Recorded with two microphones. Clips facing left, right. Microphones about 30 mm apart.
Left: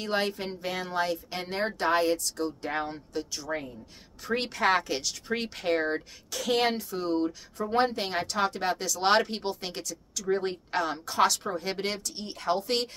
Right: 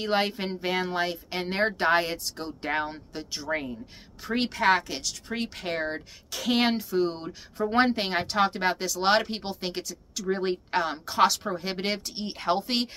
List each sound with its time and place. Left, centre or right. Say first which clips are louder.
0.0 s speech: right 3 dB; right
4.2 s speech: right 1 dB; centre
6.4 s speech: right 1 dB; centre
7.7 s speech: right 2 dB; right
12.0 s speech: right 3 dB; right
12.6 s speech: even; centre